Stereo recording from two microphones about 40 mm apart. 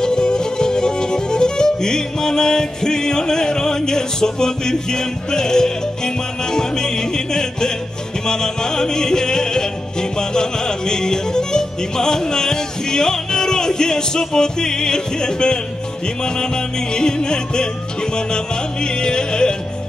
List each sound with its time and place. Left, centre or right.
0.0 s music: centre
16.9 s music: left